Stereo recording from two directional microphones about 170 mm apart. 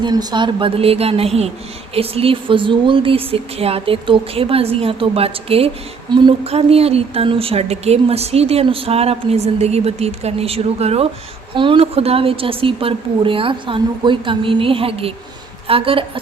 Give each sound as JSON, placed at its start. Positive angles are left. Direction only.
{"t": 0.0, "sound": "speech", "side_deg": -25}